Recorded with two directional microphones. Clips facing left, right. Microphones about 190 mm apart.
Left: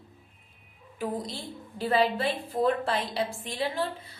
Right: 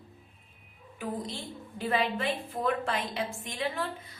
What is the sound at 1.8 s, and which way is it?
A woman's voice, 35° left (ahead or behind).